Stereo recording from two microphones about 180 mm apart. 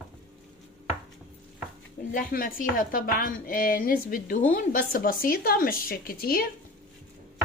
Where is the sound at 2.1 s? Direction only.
50° left (ahead or behind).